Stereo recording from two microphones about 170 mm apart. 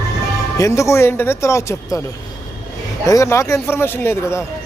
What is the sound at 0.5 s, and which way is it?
Speech, 20° left (ahead or behind).